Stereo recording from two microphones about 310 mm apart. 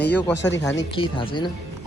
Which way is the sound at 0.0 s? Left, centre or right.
Centre.